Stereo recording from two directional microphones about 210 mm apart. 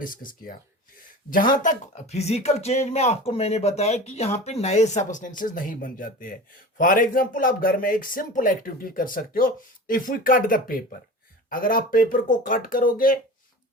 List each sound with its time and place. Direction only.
0.0 s speech: 40° left (ahead or behind)